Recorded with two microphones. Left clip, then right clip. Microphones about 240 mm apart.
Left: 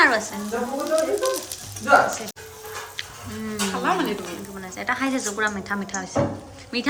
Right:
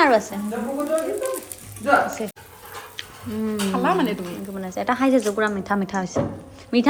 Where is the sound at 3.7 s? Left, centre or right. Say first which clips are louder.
Right 2 dB; right.